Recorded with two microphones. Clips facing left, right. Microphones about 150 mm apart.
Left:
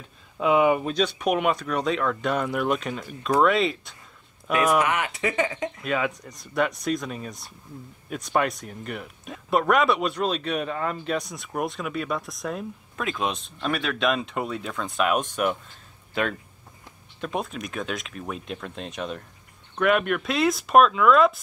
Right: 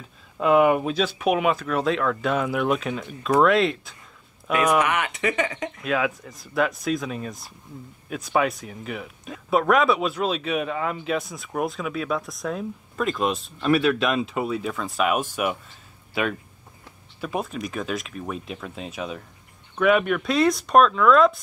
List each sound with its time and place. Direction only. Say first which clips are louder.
0.4 s speech: right 2 dB; centre (ahead or behind)
4.8 s speech: right 1 dB; 20° left (ahead or behind)
5.8 s speech: right 3 dB; centre (ahead or behind)